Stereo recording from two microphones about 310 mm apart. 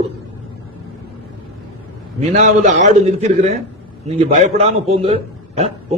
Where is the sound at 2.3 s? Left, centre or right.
Right.